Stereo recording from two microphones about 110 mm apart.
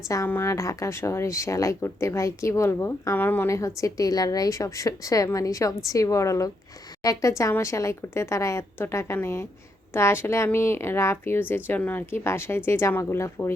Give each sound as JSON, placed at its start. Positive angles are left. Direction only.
{"t": 0.3, "sound": "speech", "side_deg": 25}